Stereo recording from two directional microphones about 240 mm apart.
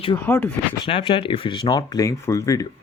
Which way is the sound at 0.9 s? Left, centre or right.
Left.